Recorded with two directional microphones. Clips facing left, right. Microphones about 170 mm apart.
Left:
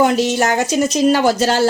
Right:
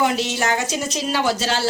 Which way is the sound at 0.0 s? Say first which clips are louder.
Left 6 dB; 45° left (ahead or behind).